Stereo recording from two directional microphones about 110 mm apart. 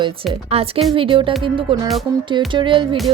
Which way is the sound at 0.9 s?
50° right (ahead or behind).